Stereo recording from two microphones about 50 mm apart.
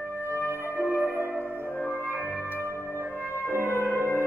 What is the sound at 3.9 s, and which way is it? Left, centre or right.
Music, left.